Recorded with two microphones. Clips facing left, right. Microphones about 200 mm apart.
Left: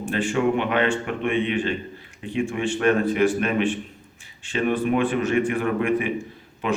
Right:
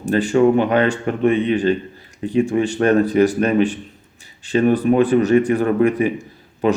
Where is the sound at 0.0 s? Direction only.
40° right (ahead or behind).